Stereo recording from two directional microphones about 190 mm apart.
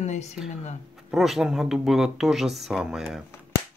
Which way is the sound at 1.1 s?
Centre (ahead or behind).